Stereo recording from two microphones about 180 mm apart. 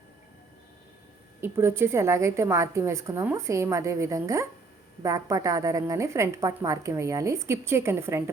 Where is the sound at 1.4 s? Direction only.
15° right (ahead or behind).